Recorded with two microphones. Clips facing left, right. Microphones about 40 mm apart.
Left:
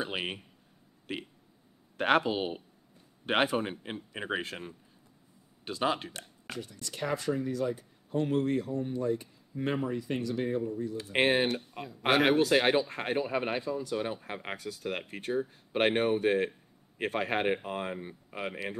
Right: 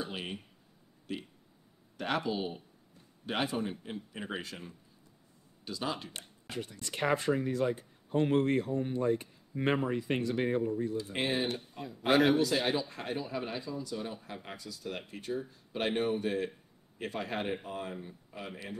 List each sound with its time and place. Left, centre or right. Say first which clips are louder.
0.0 s a man's voice: left 4 dB; left
6.5 s speech: right 1 dB; right
11.0 s a man's voice: left 6 dB; left